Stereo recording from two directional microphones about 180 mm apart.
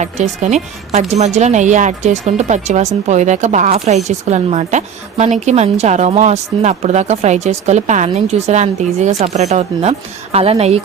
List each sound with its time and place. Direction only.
0.0 s speech: 40° right (ahead or behind)